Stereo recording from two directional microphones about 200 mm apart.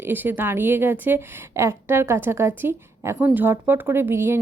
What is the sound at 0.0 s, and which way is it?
A woman's voice, 10° right (ahead or behind).